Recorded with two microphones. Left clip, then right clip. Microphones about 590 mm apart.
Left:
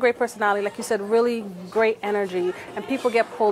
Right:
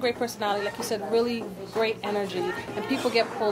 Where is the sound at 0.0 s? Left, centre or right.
Left.